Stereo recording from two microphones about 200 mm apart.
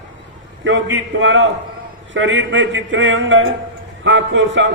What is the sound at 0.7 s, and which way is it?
A man's voice, 65° right (ahead or behind).